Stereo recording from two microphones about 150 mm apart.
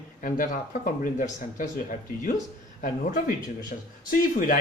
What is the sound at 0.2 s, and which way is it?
Speech, 65° left (ahead or behind).